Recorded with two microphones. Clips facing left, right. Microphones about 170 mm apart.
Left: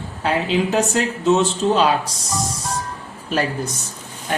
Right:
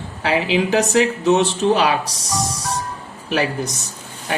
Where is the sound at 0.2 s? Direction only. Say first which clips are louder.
Right 1 dB; 85° right.